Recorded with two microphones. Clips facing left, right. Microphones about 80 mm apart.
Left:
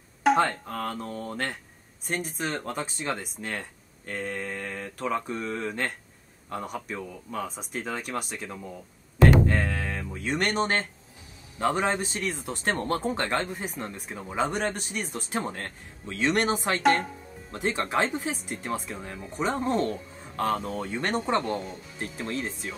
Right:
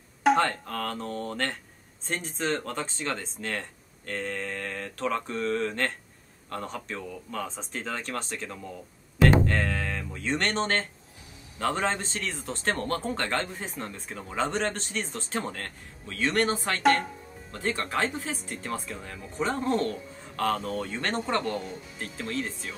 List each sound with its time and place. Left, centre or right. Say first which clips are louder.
0.2 s speech: even; centre
9.4 s music: left 1 dB; centre
11.6 s speech: left 2 dB; centre
16.8 s speech: right 1 dB; centre
17.5 s speech: left 2 dB; centre